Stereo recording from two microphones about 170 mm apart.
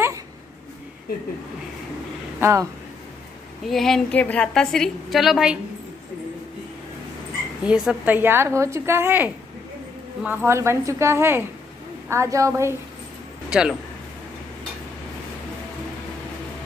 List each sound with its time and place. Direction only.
2.4 s speech: 20° right (ahead or behind)
3.6 s a woman's voice: centre (ahead or behind)
7.6 s a woman's voice: 5° right (ahead or behind)
13.5 s speech: 5° right (ahead or behind)